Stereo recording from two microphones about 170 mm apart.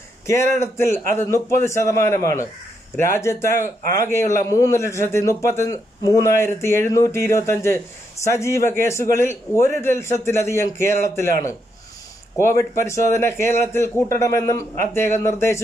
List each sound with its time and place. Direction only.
0.3 s a man's voice: 15° left (ahead or behind)